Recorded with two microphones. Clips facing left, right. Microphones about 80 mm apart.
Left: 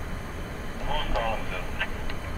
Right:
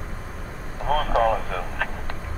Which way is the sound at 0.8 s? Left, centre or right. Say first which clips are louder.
Right 9 dB; right.